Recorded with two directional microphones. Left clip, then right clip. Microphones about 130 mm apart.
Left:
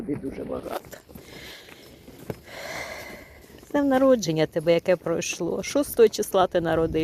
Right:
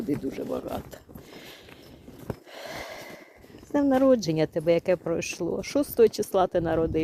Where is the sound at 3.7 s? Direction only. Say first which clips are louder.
Left 2 dB; 5° right (ahead or behind).